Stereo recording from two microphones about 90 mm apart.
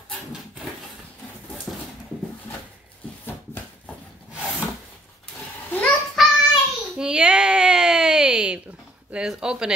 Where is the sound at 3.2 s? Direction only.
20° left (ahead or behind).